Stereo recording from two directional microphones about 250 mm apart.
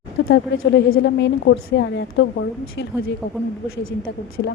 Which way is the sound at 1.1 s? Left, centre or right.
Left.